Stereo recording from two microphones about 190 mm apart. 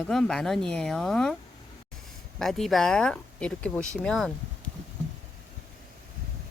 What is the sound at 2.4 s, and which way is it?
Speech, centre (ahead or behind).